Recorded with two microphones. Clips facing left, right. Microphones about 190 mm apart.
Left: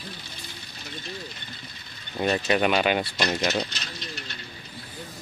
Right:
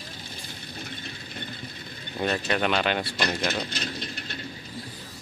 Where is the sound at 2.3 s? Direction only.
10° left (ahead or behind).